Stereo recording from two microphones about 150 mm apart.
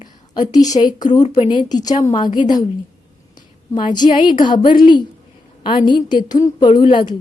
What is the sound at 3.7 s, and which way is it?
A woman's voice, 30° left (ahead or behind).